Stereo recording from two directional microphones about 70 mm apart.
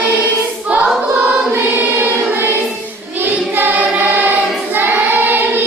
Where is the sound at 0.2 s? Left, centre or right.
Right.